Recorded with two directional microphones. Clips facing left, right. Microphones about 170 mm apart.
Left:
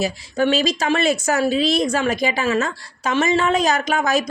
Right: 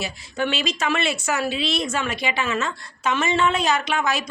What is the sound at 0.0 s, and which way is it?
A woman's voice, 40° left (ahead or behind).